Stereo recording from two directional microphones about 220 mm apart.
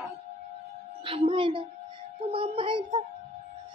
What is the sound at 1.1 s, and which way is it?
Speech, 25° right (ahead or behind).